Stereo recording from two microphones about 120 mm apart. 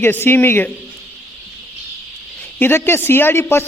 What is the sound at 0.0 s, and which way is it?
Speech, 20° left (ahead or behind).